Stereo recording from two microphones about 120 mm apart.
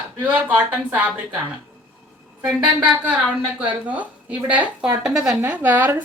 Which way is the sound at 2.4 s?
10° right (ahead or behind).